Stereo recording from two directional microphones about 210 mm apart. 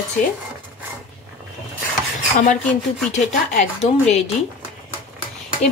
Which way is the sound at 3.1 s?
30° left (ahead or behind).